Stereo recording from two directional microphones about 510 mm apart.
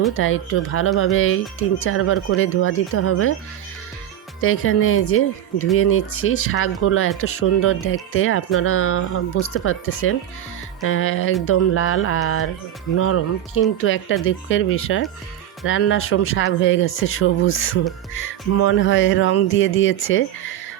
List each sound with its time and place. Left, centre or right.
0.2 s speech: left
4.4 s speech: left